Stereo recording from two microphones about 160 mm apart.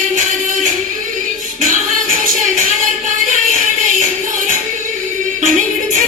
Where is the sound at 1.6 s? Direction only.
55° right (ahead or behind).